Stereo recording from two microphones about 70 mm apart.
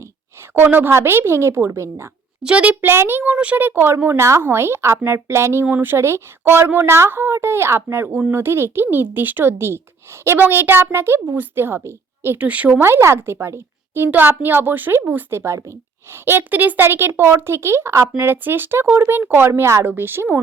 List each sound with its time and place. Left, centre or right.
0.5 s a woman's voice: right
2.4 s a woman's voice: centre; by 3.3 s right
3.3 s speech: right
12.4 s a woman's voice: right
12.8 s a woman's voice: right
15.3 s a woman's voice: right
16.2 s speech: right
18.2 s speech: right